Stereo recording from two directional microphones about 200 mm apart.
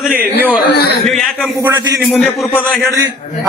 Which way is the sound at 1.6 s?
10° right (ahead or behind).